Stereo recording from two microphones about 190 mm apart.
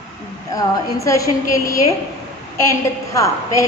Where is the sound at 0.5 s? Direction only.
15° left (ahead or behind).